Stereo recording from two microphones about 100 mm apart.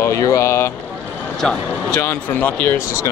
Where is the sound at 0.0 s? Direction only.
30° left (ahead or behind).